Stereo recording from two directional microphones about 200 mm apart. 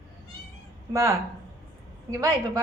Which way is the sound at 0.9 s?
15° right (ahead or behind).